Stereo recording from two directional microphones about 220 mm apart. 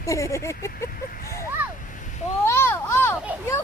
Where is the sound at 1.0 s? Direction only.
40° left (ahead or behind).